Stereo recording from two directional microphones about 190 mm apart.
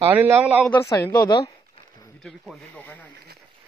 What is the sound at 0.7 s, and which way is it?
Speech, 15° left (ahead or behind).